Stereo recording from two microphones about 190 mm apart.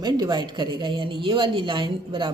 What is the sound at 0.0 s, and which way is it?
Speech, 20° right (ahead or behind).